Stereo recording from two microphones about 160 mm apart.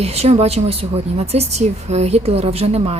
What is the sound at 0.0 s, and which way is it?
Speech, 40° right (ahead or behind).